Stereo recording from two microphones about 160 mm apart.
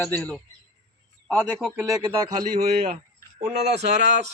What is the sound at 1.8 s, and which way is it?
Speech, 20° right (ahead or behind).